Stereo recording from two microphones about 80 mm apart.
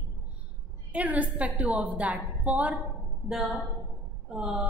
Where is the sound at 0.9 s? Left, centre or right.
Centre.